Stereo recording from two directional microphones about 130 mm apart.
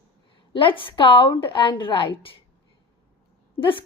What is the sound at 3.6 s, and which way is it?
Speech, 40° left (ahead or behind).